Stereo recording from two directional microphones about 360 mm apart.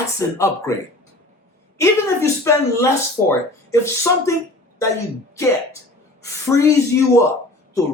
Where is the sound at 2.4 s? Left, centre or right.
Centre.